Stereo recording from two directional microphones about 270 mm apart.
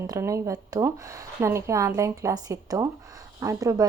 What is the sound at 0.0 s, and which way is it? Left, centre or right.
A woman's voice, centre.